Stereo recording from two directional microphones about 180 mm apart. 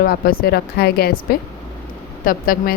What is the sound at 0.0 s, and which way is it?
A woman's voice, 55° left (ahead or behind).